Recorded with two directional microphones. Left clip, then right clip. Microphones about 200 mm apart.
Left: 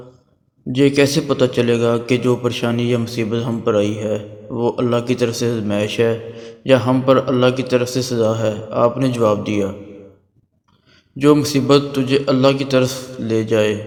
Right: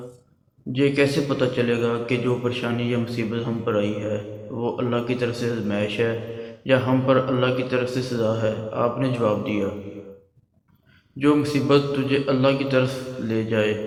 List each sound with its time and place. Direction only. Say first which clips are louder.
0.7 s a man's voice: left 6 dB; 45° left (ahead or behind)
11.2 s a man's voice: left 6 dB; 45° left (ahead or behind)